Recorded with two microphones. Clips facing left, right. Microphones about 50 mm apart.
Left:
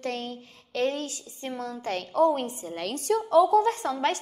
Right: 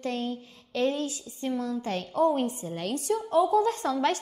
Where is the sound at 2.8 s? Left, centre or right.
Left.